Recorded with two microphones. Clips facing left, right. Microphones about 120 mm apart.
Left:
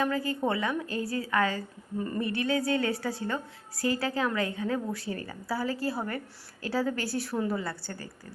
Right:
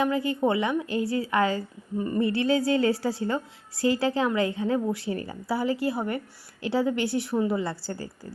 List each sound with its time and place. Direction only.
0.0 s a woman's voice: 20° right (ahead or behind)
7.6 s a woman's voice: 30° right (ahead or behind)